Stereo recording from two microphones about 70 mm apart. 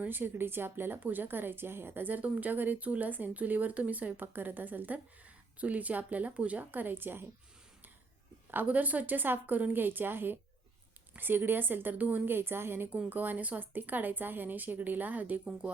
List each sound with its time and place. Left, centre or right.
0.0 s speech: right
8.4 s speech: right
12.9 s speech: right